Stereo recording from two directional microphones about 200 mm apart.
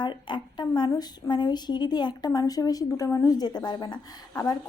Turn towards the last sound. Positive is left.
turn(degrees=20)  # may be behind; listen again after turning